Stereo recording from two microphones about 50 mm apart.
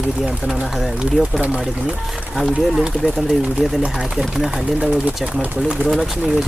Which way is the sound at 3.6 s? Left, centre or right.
Right.